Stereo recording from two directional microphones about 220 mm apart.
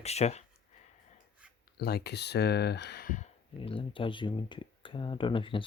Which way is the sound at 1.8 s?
45° left (ahead or behind).